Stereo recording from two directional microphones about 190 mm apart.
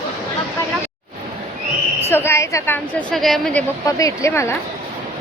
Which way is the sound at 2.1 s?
10° left (ahead or behind).